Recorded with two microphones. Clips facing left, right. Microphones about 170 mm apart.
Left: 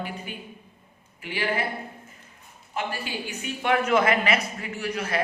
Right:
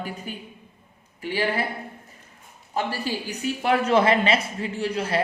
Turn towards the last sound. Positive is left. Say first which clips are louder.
# right 3 dB
turn(degrees=-30)  # may be behind; listen again after turning